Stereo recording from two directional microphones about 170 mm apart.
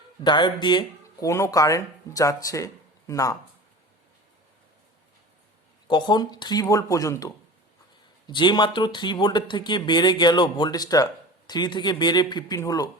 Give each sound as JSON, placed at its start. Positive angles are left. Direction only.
{"t": 0.3, "sound": "speech", "side_deg": 25}
{"t": 5.9, "sound": "speech", "side_deg": 25}